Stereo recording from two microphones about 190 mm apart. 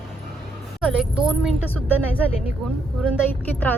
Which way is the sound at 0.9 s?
5° right (ahead or behind).